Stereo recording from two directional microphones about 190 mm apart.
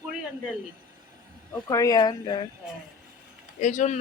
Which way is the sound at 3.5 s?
40° left (ahead or behind).